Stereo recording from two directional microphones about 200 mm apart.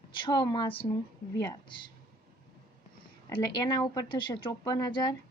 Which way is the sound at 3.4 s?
20° left (ahead or behind).